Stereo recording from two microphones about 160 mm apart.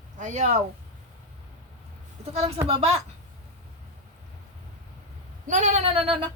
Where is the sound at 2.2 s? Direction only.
40° right (ahead or behind).